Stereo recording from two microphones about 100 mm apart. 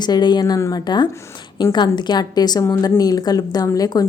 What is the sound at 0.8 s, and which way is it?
A woman's voice, 50° left (ahead or behind).